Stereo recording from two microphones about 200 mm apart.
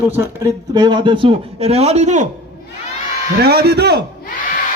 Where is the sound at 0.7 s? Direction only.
20° right (ahead or behind); by 2.3 s 35° right (ahead or behind).